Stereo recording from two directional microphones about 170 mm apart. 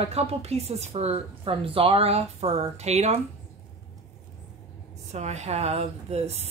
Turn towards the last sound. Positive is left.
turn(degrees=-40)  # may be behind; listen again after turning